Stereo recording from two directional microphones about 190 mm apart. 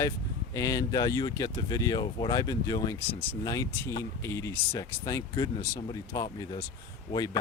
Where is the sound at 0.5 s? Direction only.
20° left (ahead or behind).